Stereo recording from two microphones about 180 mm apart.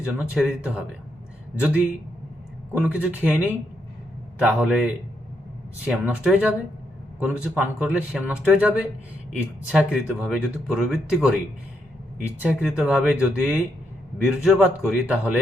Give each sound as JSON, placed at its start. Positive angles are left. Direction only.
{"t": 0.3, "sound": "speech", "side_deg": -5}
{"t": 12.4, "sound": "speech", "side_deg": -5}